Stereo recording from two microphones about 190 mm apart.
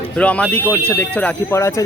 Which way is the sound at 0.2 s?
5° left (ahead or behind).